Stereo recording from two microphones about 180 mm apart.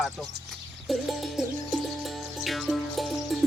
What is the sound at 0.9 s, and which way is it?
Music, centre (ahead or behind).